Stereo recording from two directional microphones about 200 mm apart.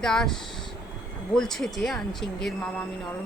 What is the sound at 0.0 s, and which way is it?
Speech, centre (ahead or behind).